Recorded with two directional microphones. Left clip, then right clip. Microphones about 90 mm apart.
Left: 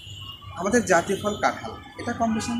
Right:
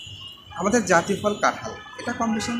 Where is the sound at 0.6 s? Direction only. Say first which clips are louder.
Right 1 dB; 25° right (ahead or behind).